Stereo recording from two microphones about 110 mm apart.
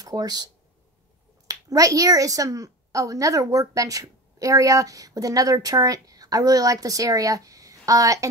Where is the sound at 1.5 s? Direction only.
30° right (ahead or behind).